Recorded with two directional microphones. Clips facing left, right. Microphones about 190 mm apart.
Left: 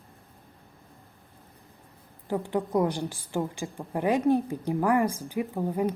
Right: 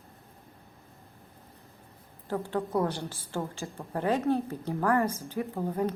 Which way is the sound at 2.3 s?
15° left (ahead or behind).